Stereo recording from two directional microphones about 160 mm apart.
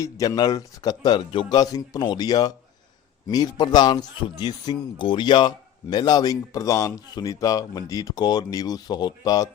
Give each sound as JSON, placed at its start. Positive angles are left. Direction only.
{"t": 0.0, "sound": "speech", "side_deg": 25}